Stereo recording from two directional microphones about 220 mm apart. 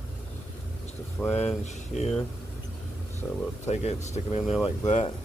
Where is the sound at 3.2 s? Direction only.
5° left (ahead or behind).